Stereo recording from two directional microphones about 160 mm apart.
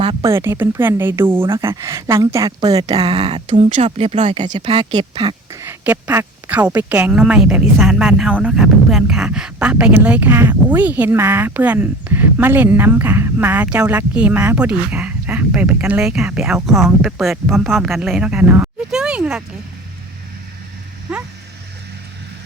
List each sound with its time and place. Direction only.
0.0 s a sound: 35° right (ahead or behind)
0.3 s a woman's voice: 15° right (ahead or behind)
3.0 s a woman's voice: 35° right (ahead or behind)
5.6 s speech: 10° right (ahead or behind)